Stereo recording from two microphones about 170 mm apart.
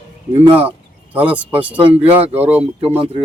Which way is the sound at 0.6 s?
10° right (ahead or behind).